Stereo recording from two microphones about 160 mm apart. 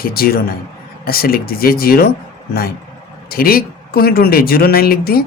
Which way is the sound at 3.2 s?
70° left (ahead or behind).